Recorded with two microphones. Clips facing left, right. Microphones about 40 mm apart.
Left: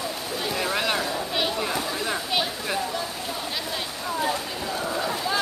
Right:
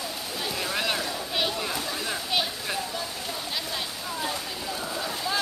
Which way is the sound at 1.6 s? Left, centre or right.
Centre.